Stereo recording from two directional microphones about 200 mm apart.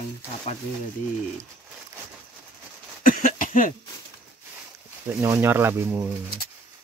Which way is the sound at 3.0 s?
40° left (ahead or behind).